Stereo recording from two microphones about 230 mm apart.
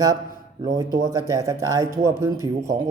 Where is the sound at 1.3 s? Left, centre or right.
Centre.